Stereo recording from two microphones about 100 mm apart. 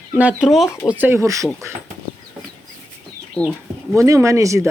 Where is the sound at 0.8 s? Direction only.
20° right (ahead or behind).